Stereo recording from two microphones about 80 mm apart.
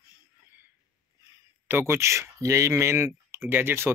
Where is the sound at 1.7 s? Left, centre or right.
Right.